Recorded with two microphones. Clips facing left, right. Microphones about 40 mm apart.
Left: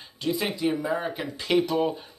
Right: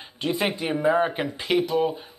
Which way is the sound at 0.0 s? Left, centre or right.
Right.